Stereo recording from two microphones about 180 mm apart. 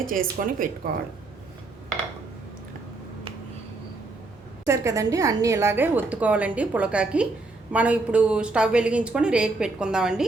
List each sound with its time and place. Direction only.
0.1 s speech: 50° right (ahead or behind)
4.6 s a woman's voice: 15° right (ahead or behind)